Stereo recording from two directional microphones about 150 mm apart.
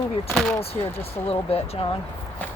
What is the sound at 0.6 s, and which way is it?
Speech, 40° left (ahead or behind).